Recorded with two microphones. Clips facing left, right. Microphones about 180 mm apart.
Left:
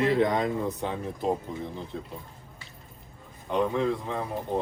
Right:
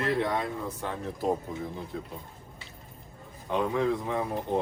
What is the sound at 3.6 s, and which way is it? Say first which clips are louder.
Speech: right 1 dB; 5° right (ahead or behind).